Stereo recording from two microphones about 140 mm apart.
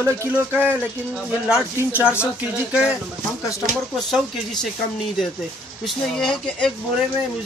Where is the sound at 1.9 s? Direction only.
15° left (ahead or behind).